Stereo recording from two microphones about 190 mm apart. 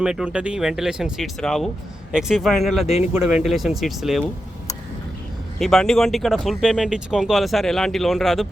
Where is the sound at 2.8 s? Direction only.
35° left (ahead or behind).